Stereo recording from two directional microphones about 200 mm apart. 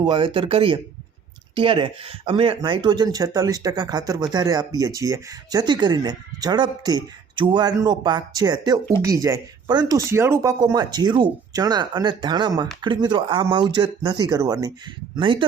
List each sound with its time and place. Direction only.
0.0 s speech: 25° right (ahead or behind)